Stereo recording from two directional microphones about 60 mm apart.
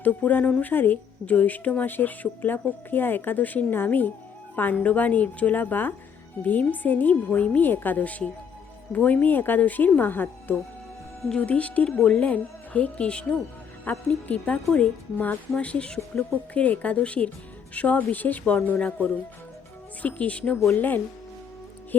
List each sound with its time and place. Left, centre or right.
0.0 s speech: left
11.3 s speech: left